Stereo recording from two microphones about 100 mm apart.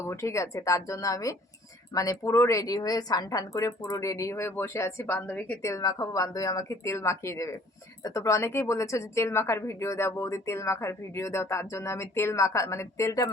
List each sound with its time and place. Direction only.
0.0 s a woman's voice: 30° left (ahead or behind)
5.6 s a woman's voice: 35° left (ahead or behind)